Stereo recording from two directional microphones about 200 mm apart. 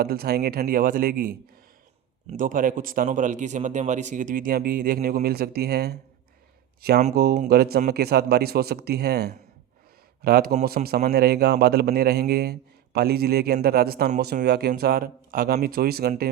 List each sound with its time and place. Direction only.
0.0 s a man's voice: 50° right (ahead or behind)
10.8 s speech: 40° right (ahead or behind)
11.1 s a man's voice: 50° right (ahead or behind)